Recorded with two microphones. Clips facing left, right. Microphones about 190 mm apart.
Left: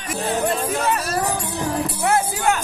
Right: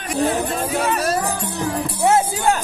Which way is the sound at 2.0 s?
25° right (ahead or behind).